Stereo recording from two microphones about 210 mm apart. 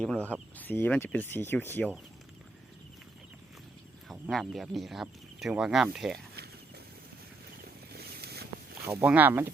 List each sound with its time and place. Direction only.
0.0 s speech: 5° left (ahead or behind)
4.1 s speech: centre (ahead or behind)
7.6 s a sound: 50° right (ahead or behind)
8.9 s speech: 10° right (ahead or behind)